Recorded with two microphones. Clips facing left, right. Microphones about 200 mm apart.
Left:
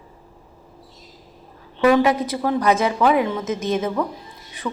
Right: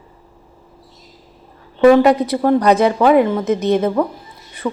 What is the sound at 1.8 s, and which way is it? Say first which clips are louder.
A woman's voice: right 6 dB; 50° right (ahead or behind).